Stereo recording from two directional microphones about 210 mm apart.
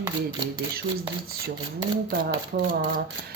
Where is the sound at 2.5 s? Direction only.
45° right (ahead or behind).